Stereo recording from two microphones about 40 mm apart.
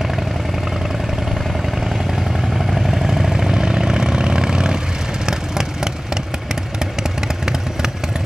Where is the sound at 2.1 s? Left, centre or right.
Centre.